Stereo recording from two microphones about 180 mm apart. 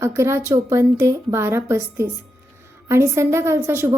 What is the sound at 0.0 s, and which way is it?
A woman's voice, 15° right (ahead or behind).